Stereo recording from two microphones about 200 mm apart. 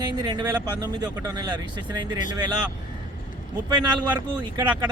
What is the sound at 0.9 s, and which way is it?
Speech, 20° right (ahead or behind).